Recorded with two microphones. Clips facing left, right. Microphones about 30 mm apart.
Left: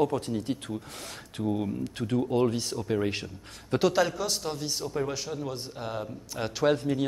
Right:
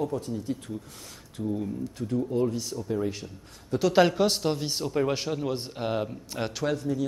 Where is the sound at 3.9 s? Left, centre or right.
Right.